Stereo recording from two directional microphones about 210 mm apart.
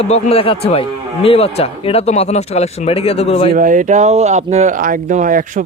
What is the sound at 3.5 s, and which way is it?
Speech, 40° right (ahead or behind).